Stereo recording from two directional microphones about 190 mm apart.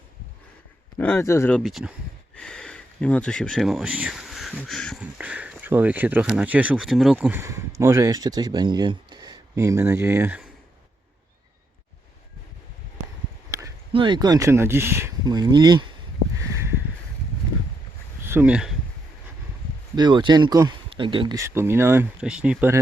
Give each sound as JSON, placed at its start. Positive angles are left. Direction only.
{"t": 0.9, "sound": "speech", "side_deg": 10}
{"t": 13.9, "sound": "speech", "side_deg": -25}
{"t": 18.3, "sound": "speech", "side_deg": -10}
{"t": 20.0, "sound": "speech", "side_deg": -25}